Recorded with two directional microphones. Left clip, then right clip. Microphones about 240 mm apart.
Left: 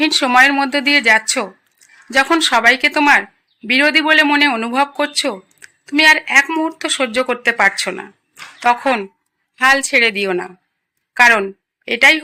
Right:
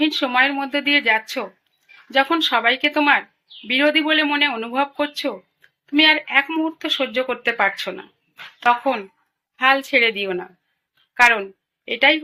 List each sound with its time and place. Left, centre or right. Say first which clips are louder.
0.0 s speech: left 7 dB; left